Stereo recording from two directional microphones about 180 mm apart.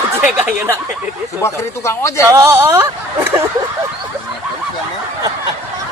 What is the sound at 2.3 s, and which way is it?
Speech, 15° right (ahead or behind).